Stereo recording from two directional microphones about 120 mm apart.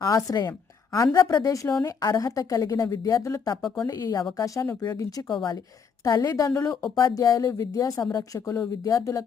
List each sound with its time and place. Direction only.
0.0 s a woman's voice: 30° left (ahead or behind)